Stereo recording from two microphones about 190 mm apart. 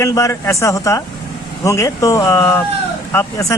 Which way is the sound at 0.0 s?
15° left (ahead or behind).